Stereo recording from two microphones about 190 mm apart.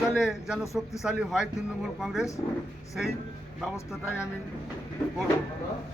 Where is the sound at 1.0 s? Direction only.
Centre (ahead or behind).